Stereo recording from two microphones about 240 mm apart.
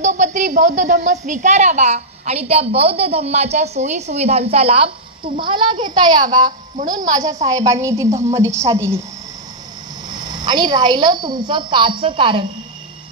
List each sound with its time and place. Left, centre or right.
0.0 s a woman's voice: right; by 9.0 s centre
10.0 s a woman's voice: centre